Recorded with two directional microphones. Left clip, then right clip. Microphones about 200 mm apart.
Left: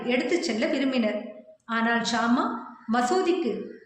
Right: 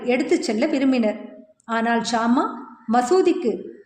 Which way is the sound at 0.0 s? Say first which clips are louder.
Right 5 dB; 55° right (ahead or behind).